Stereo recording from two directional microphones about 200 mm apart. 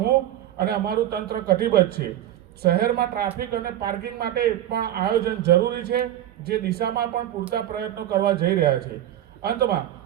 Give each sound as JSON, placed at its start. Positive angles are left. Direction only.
{"t": 0.5, "sound": "a man's voice", "side_deg": -50}